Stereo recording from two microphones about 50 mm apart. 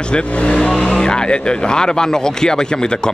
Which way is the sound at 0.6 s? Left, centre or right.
Centre.